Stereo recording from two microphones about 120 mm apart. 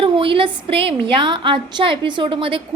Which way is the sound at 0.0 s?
45° right (ahead or behind).